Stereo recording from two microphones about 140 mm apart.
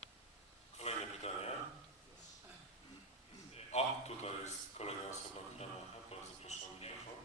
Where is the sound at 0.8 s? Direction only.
50° left (ahead or behind).